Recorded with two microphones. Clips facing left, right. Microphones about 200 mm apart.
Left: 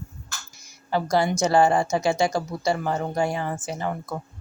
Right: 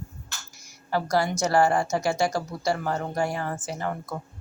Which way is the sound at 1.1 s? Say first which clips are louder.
Left 3 dB; 20° left (ahead or behind).